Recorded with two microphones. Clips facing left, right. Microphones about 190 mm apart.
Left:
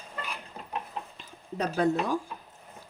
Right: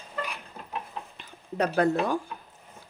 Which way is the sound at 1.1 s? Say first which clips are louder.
Right 6 dB; 65° right (ahead or behind).